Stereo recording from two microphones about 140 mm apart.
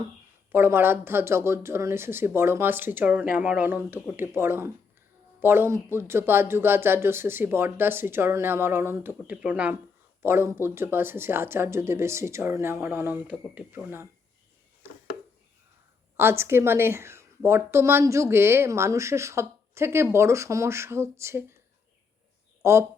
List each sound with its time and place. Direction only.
0.5 s speech: 15° right (ahead or behind)
16.1 s a woman's voice: 20° right (ahead or behind)
22.6 s speech: 20° right (ahead or behind)